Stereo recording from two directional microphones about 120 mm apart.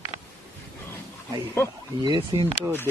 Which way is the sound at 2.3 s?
30° right (ahead or behind).